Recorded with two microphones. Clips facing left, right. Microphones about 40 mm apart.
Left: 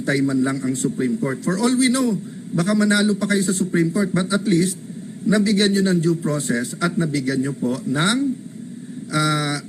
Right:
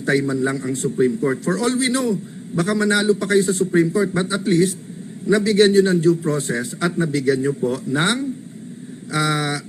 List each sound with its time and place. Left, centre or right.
0.0 s a man's voice: right